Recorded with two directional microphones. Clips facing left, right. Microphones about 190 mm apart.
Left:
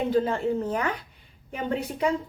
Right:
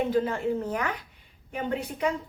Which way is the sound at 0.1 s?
30° left (ahead or behind).